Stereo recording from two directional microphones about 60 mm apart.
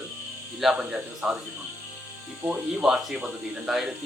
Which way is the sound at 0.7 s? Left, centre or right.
Centre.